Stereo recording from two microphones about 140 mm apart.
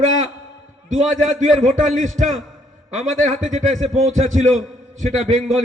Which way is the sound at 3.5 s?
60° right (ahead or behind).